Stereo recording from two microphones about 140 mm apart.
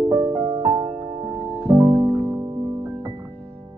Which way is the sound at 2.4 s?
30° right (ahead or behind).